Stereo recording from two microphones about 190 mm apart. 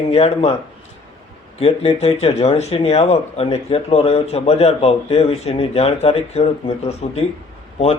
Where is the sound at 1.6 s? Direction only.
30° left (ahead or behind).